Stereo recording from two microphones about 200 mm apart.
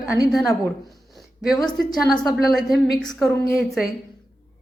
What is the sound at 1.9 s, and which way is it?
Speech, 20° left (ahead or behind).